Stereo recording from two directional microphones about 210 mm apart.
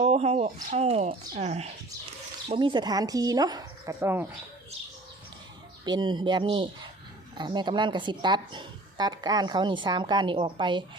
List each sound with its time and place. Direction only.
0.0 s speech: 30° right (ahead or behind); by 4.3 s 10° right (ahead or behind)
5.8 s a woman's voice: 20° right (ahead or behind)